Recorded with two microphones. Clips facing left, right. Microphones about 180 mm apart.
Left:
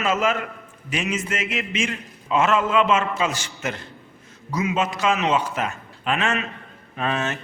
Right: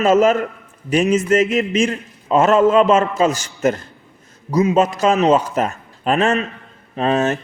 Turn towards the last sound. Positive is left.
turn(degrees=-35)  # may be behind; listen again after turning